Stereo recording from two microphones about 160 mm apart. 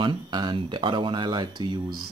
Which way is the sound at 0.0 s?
30° right (ahead or behind).